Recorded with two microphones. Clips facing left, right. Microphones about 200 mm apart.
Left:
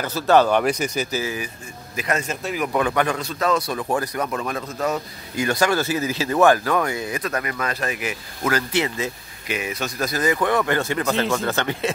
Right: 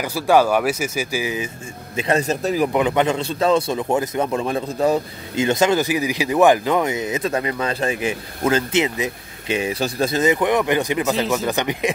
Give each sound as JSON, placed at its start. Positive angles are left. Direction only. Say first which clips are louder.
{"t": 0.0, "sound": "speech", "louder": "right 1 dB", "side_deg": -10}
{"t": 2.0, "sound": "speech", "louder": "right 6 dB", "side_deg": -30}
{"t": 2.7, "sound": "a man's voice", "louder": "right 3 dB", "side_deg": -20}
{"t": 9.6, "sound": "a man's voice", "louder": "right 5 dB", "side_deg": -30}